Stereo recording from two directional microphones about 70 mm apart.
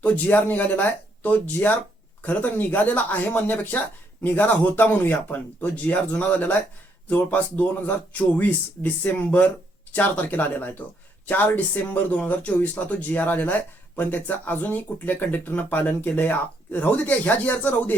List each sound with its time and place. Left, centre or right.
0.0 s speech: left